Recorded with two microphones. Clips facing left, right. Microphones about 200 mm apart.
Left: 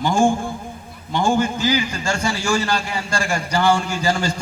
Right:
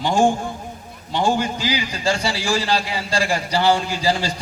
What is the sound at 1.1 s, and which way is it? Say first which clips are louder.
A man's voice: left 1 dB; 45° left (ahead or behind).